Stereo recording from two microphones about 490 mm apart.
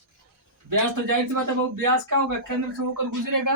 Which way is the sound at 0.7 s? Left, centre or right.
Right.